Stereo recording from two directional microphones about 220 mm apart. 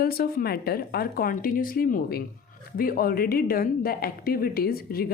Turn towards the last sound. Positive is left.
turn(degrees=45)  # may be behind; listen again after turning